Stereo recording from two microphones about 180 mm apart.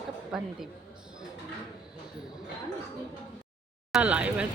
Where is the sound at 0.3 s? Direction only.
Centre (ahead or behind).